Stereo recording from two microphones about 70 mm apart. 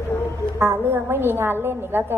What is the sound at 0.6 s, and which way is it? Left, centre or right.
A woman's voice, right.